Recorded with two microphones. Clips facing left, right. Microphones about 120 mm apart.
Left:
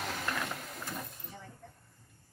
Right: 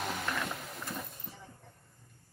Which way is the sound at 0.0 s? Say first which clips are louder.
Right 1 dB; 5° right (ahead or behind).